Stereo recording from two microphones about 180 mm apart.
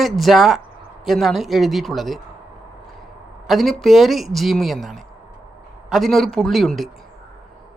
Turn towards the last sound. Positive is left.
turn(degrees=0)  # may be behind; listen again after turning